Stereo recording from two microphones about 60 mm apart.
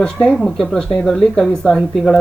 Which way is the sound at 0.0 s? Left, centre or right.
Centre.